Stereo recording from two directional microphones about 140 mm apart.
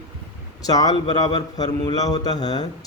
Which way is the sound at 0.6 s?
25° left (ahead or behind).